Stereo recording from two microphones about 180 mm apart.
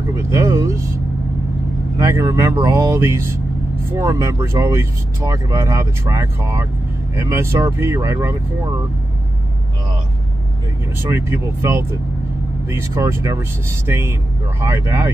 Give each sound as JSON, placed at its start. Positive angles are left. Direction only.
{"t": 0.1, "sound": "vehicle", "side_deg": -15}
{"t": 2.0, "sound": "speech", "side_deg": -15}
{"t": 11.0, "sound": "speech", "side_deg": -15}